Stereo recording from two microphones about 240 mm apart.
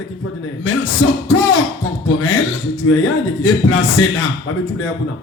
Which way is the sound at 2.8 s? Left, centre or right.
Left.